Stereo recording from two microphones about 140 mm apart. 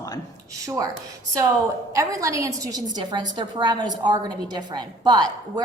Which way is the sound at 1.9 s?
25° right (ahead or behind).